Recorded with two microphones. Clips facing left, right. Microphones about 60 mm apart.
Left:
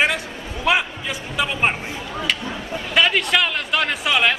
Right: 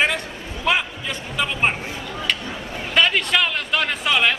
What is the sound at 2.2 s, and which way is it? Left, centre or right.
Speech, centre.